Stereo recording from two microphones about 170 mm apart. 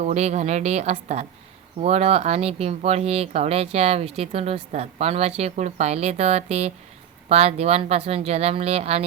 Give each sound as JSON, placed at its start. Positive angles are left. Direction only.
{"t": 0.0, "sound": "speech", "side_deg": -40}